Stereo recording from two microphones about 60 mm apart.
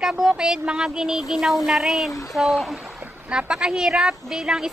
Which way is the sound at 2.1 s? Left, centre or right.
Left.